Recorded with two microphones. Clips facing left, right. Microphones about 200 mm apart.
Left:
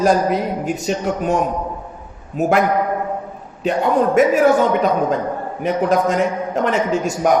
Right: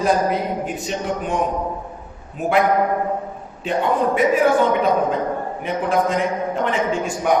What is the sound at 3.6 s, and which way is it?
Speech, 40° left (ahead or behind).